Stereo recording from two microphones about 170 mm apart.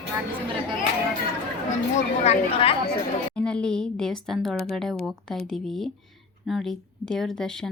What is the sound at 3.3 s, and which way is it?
Speech, 5° left (ahead or behind).